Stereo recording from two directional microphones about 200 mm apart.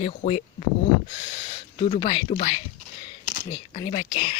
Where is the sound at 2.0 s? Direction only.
25° left (ahead or behind).